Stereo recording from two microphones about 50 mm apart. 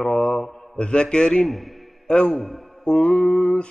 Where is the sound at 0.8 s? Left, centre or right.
Centre.